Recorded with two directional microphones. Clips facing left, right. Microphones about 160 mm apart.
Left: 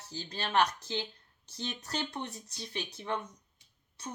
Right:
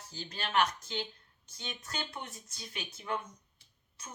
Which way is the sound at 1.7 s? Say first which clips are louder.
Left 3 dB; 35° left (ahead or behind).